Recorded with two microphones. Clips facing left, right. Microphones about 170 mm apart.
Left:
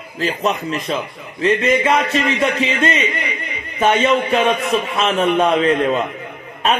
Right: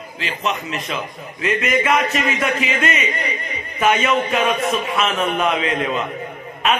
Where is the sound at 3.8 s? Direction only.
30° left (ahead or behind).